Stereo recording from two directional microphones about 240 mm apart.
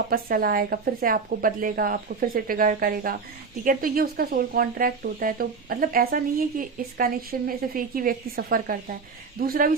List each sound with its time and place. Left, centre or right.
0.1 s speech: right